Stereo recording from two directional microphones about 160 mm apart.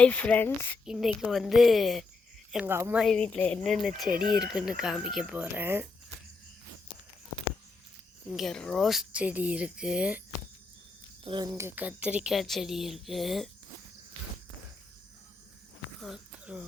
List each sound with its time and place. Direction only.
0.0 s speech: 10° left (ahead or behind)
0.9 s speech: 5° right (ahead or behind)
2.6 s speech: 15° right (ahead or behind)
3.0 s speech: 5° left (ahead or behind); by 5.9 s 15° right (ahead or behind)
8.3 s speech: centre (ahead or behind)
11.2 s speech: 35° right (ahead or behind)
11.5 s speech: 15° right (ahead or behind)
16.0 s a sound: centre (ahead or behind)